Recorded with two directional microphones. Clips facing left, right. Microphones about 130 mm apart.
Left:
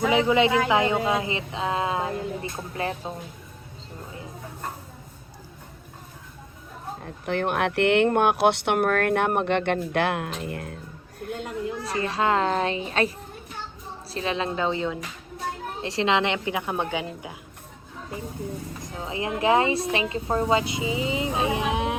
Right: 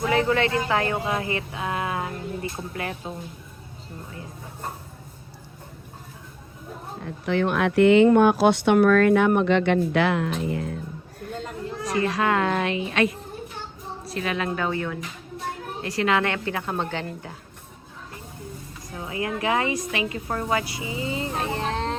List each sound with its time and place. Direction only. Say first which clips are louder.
0.1 s speech: left 1 dB; 15° left (ahead or behind)
7.0 s speech: right 3 dB; 50° left (ahead or behind)
11.8 s a child's voice: right 4 dB; 30° left (ahead or behind); by 17.3 s 10° left (ahead or behind)
18.9 s speech: even; 25° left (ahead or behind)